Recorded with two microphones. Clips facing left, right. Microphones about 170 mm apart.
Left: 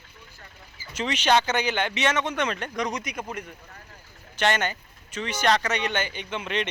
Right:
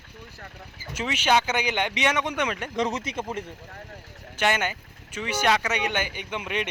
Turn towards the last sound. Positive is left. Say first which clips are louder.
# left 1 dB
turn(degrees=-10)  # may be behind; listen again after turning